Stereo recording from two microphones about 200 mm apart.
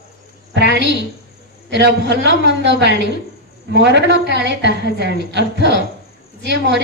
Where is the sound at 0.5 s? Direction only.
60° right (ahead or behind).